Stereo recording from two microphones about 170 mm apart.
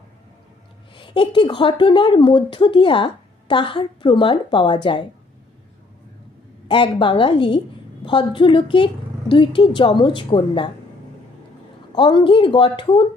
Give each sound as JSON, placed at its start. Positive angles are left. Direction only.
{"t": 0.9, "sound": "speech", "side_deg": 30}
{"t": 6.7, "sound": "speech", "side_deg": 30}
{"t": 11.9, "sound": "speech", "side_deg": 30}